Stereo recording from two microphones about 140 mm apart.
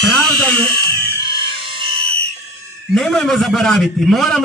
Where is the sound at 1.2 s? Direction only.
35° right (ahead or behind).